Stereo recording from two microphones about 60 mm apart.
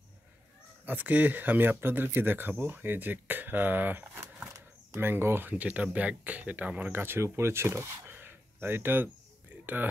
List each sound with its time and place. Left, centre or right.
0.8 s speech: right
5.0 s speech: right
6.9 s speech: right
8.1 s a sound: right